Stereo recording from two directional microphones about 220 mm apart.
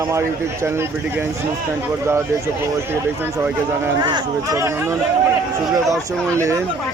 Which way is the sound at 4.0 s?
15° right (ahead or behind).